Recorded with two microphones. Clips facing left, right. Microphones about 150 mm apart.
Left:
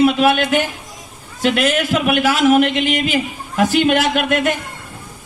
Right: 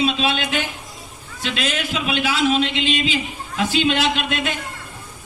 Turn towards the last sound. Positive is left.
turn(degrees=55)  # may be behind; listen again after turning